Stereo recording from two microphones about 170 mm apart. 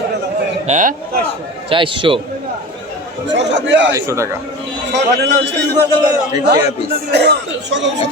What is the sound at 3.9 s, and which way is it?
Speech, 20° right (ahead or behind).